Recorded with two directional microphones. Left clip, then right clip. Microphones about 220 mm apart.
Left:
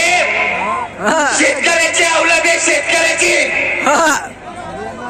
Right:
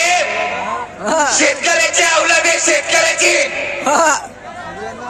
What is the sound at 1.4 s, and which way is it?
Music, 55° right (ahead or behind).